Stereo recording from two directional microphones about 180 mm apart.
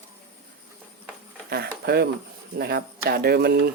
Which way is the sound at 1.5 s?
65° right (ahead or behind).